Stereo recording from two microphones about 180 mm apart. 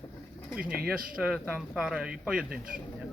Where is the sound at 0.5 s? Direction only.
5° right (ahead or behind).